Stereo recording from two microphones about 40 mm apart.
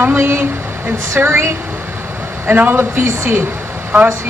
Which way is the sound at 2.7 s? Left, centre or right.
Right.